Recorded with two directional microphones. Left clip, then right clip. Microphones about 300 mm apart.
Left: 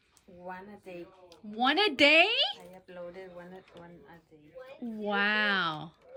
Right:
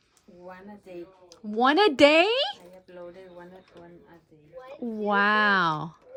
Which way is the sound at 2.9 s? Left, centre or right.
Centre.